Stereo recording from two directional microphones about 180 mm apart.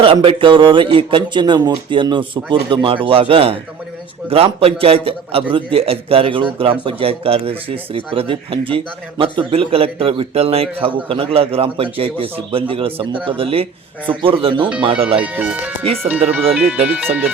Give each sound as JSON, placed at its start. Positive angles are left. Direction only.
{"t": 0.0, "sound": "a man's voice", "side_deg": -30}
{"t": 15.2, "sound": "speech", "side_deg": -10}